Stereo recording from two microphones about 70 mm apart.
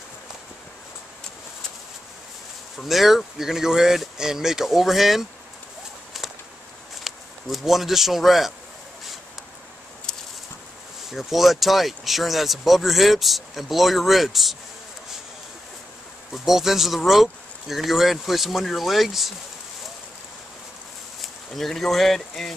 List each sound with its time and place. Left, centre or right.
2.8 s speech: centre
7.1 s speech: centre
11.1 s speech: centre
16.4 s speech: centre
21.2 s speech: centre